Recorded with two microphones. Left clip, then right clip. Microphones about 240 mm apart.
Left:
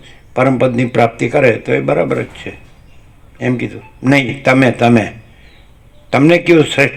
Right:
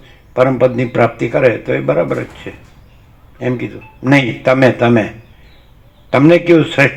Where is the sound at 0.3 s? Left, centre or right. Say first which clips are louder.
Right 1 dB; left.